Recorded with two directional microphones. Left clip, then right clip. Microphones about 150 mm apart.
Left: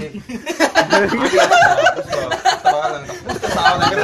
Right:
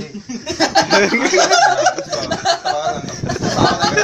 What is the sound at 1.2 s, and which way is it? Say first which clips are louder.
Speech: even; 60° left (ahead or behind).